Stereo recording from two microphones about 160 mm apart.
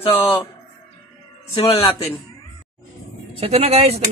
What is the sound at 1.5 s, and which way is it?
Speech, 35° left (ahead or behind).